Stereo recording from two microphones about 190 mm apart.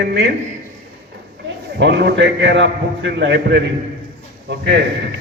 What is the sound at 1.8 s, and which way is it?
A man's voice, 60° right (ahead or behind).